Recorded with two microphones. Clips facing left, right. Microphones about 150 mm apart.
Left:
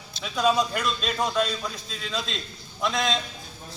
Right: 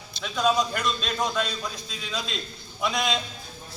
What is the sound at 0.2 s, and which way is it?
A man's voice, 5° left (ahead or behind).